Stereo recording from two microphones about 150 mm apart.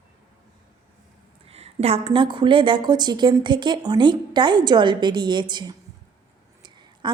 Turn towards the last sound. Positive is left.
turn(degrees=-30)  # may be behind; listen again after turning